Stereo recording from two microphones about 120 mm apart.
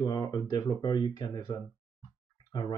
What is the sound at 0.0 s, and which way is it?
Speech, 35° left (ahead or behind).